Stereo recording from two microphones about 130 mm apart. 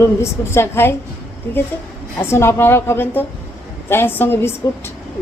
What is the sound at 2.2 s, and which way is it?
A woman's voice, 20° left (ahead or behind).